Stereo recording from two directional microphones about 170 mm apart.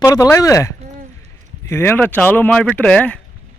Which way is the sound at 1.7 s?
15° left (ahead or behind).